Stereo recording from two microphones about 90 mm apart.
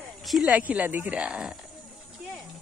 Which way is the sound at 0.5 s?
15° right (ahead or behind).